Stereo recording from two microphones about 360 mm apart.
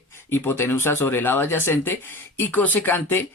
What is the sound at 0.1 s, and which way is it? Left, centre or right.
Speech, centre.